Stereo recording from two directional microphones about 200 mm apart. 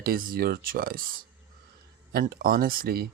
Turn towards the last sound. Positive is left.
turn(degrees=-50)  # may be behind; listen again after turning